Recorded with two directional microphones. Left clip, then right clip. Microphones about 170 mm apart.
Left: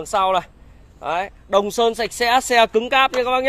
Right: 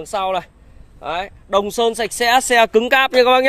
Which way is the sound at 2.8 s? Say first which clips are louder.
Right 2 dB; 50° right (ahead or behind).